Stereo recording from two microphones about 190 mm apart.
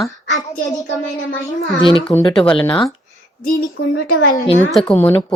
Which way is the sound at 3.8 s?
60° left (ahead or behind).